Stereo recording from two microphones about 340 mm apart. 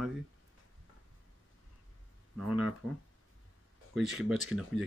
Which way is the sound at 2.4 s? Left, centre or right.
Centre.